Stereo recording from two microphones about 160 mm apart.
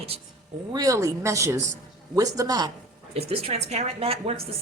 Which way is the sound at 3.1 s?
40° right (ahead or behind).